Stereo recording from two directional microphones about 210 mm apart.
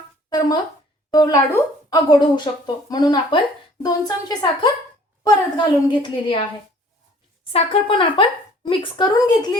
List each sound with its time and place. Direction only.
0.3 s a sound: 20° left (ahead or behind)
1.1 s a woman's voice: 20° left (ahead or behind)
7.5 s speech: 25° left (ahead or behind)